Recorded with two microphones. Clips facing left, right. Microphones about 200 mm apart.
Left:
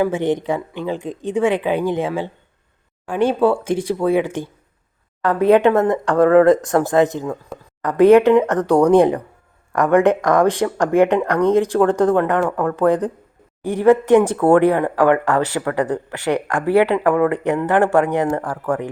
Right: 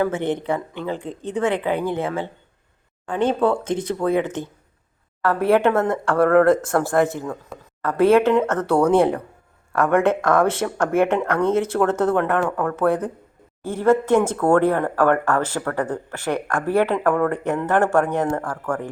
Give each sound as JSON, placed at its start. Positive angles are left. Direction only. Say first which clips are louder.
{"t": 0.0, "sound": "speech", "louder": "left 3 dB", "side_deg": 15}